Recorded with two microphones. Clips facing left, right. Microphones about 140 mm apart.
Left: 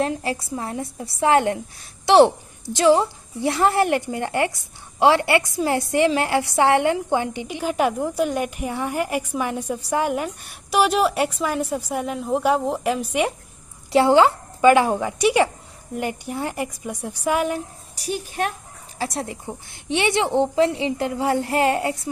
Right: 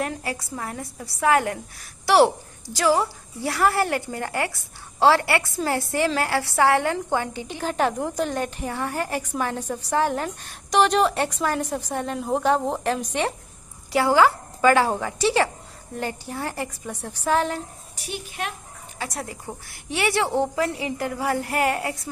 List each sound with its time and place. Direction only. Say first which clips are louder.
0.0 s a woman's voice: left 5 dB; 25° left (ahead or behind); by 13.1 s 10° left (ahead or behind)
13.9 s a woman's voice: left 3 dB; 25° left (ahead or behind)
17.9 s a woman's voice: left 7 dB; 40° left (ahead or behind)
18.9 s a woman's voice: left 5 dB; 30° left (ahead or behind)